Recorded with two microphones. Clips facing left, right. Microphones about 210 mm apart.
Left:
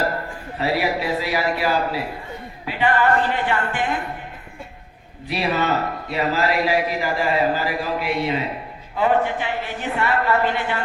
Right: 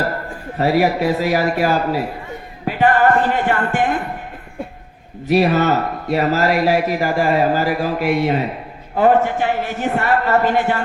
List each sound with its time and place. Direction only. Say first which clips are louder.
0.6 s a man's voice: right 6 dB; 45° right (ahead or behind)
5.3 s a man's voice: right 7 dB; 45° right (ahead or behind)